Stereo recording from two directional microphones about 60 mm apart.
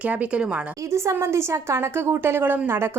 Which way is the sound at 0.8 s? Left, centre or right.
Right.